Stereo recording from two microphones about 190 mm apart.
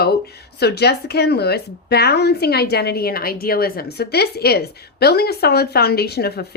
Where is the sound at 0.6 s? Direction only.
60° left (ahead or behind).